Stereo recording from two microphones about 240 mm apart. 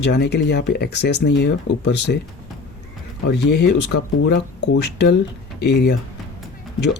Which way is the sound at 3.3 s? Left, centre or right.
Left.